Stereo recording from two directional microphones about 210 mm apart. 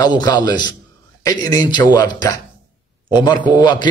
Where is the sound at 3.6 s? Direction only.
20° left (ahead or behind).